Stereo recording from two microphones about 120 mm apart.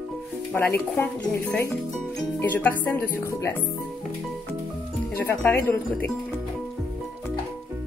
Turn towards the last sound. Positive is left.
turn(degrees=20)  # may be behind; listen again after turning